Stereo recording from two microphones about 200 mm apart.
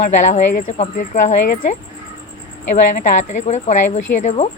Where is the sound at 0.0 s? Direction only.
35° left (ahead or behind).